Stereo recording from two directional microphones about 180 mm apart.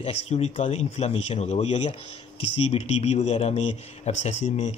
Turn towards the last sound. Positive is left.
turn(degrees=40)  # may be behind; listen again after turning